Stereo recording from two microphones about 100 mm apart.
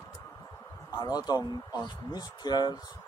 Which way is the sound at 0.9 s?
40° left (ahead or behind).